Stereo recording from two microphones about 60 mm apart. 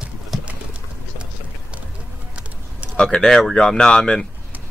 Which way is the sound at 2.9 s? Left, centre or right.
Centre.